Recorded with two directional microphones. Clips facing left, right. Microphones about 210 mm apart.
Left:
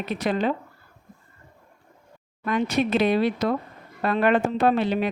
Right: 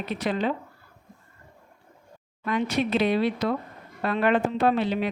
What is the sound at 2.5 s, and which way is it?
Speech, 45° left (ahead or behind).